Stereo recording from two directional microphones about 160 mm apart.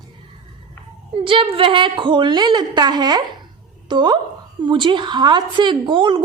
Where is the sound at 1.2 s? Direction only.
35° right (ahead or behind).